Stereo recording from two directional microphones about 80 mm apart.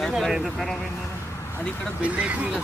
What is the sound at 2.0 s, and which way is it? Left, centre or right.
Speech, centre.